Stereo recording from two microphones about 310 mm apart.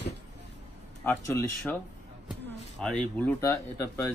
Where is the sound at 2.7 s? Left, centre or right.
Centre.